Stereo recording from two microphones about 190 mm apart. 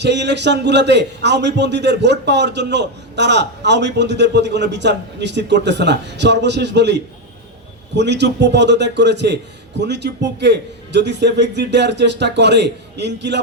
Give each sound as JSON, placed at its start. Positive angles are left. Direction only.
{"t": 0.0, "sound": "a man's voice", "side_deg": -65}